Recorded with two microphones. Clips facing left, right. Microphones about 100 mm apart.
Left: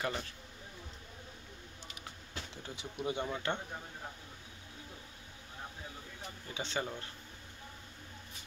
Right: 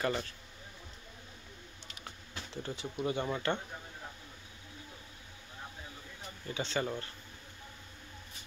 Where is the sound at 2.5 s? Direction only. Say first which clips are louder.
Right 10 dB; 10° left (ahead or behind).